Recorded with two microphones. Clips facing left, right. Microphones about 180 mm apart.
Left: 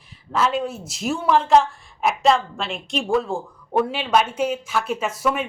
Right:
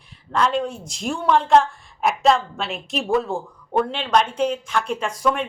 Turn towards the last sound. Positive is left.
turn(degrees=5)  # may be behind; listen again after turning